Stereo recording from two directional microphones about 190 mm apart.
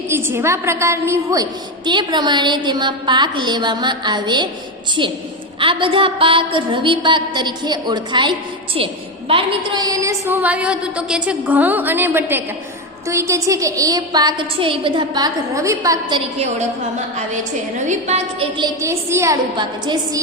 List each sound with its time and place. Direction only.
0.1 s a woman's voice: 10° right (ahead or behind)
5.5 s a woman's voice: 25° right (ahead or behind)
17.8 s a woman's voice: 35° right (ahead or behind)